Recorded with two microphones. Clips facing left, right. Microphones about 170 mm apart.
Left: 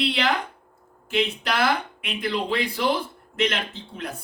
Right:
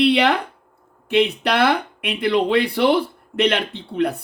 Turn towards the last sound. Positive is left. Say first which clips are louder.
# right 12 dB
turn(degrees=-65)  # may be behind; listen again after turning